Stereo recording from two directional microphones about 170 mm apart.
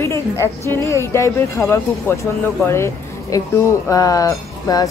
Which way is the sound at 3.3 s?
20° left (ahead or behind).